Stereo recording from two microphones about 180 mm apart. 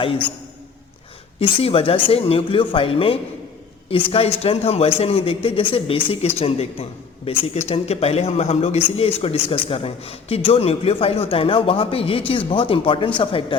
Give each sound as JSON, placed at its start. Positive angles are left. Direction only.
{"t": 1.4, "sound": "speech", "side_deg": 30}